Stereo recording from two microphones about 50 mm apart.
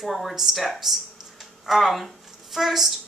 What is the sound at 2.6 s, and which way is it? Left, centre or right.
Speech, centre.